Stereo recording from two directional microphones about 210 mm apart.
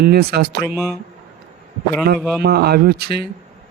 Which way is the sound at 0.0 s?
50° right (ahead or behind).